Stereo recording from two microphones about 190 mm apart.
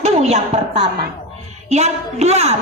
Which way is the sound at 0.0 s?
35° right (ahead or behind).